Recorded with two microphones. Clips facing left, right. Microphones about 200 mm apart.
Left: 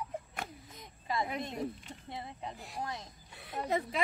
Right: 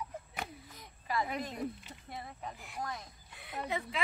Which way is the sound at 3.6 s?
40° left (ahead or behind).